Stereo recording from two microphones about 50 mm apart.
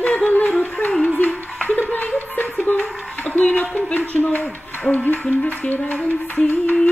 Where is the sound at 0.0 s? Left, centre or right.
Left.